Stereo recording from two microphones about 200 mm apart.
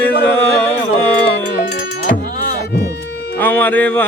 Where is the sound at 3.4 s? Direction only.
10° left (ahead or behind).